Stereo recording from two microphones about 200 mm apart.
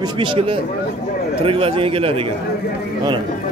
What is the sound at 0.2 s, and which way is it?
A man's voice, 25° right (ahead or behind).